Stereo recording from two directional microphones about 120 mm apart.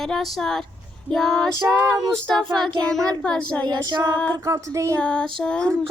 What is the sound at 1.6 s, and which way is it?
Speech, 20° right (ahead or behind).